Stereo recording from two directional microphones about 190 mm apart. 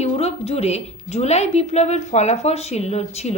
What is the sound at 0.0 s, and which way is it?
A woman's voice, 35° left (ahead or behind).